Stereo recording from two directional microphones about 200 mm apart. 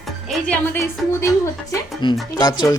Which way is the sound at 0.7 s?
15° left (ahead or behind).